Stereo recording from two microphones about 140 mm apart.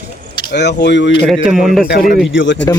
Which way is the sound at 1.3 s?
5° right (ahead or behind).